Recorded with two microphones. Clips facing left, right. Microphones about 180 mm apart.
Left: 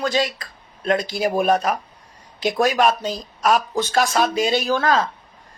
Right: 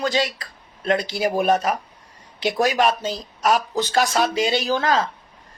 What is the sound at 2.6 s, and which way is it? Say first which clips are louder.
Speech: left 1 dB; 45° left (ahead or behind).